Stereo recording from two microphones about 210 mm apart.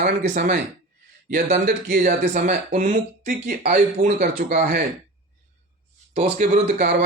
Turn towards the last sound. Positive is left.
turn(degrees=-40)  # may be behind; listen again after turning